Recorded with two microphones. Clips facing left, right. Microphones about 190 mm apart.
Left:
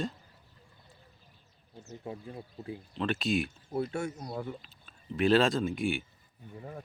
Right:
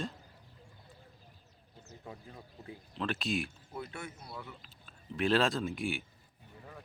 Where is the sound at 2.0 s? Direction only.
30° left (ahead or behind).